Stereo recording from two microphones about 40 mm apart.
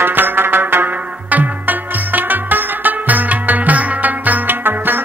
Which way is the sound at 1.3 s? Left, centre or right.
Right.